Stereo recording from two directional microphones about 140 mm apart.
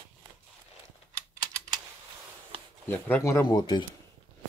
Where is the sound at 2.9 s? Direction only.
15° left (ahead or behind).